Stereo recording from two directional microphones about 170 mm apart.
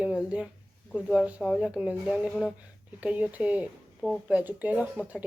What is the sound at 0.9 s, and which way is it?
Speech, centre (ahead or behind).